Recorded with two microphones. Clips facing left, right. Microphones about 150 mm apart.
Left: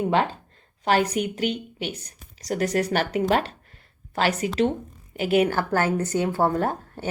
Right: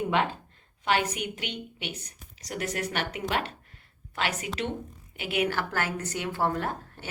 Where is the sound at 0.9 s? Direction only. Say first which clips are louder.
Left 6 dB; 40° left (ahead or behind).